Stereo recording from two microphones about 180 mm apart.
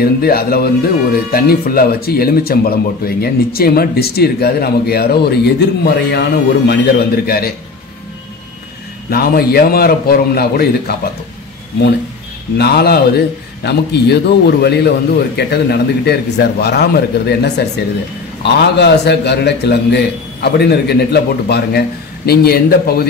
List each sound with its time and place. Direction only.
0.0 s speech: 55° left (ahead or behind)
9.1 s speech: 60° left (ahead or behind)
12.5 s speech: 60° left (ahead or behind)